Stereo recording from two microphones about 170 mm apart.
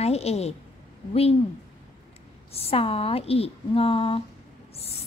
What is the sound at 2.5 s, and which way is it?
A woman's voice, 35° left (ahead or behind).